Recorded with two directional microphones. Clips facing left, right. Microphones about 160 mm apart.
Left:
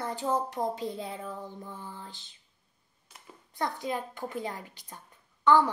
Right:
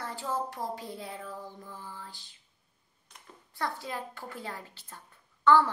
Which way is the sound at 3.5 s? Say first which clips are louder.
Left 3 dB; 20° left (ahead or behind).